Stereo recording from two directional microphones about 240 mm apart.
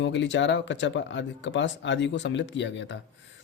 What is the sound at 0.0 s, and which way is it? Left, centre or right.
Speech, left.